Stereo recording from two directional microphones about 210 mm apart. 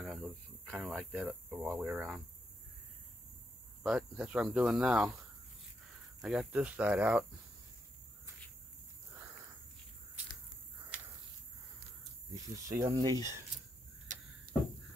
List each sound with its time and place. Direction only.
0.0 s speech: centre (ahead or behind)
3.8 s speech: 5° right (ahead or behind)
6.2 s speech: 5° right (ahead or behind)
12.4 s speech: 15° right (ahead or behind)
14.1 s a sound: 40° right (ahead or behind)